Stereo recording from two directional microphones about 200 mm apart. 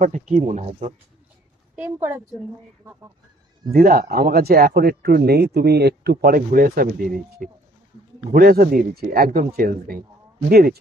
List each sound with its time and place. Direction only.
0.0 s speech: 40° right (ahead or behind)
1.8 s a woman's voice: 10° right (ahead or behind)
3.7 s speech: 45° right (ahead or behind)